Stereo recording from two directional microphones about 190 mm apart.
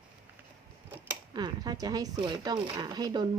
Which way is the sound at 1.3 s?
20° right (ahead or behind).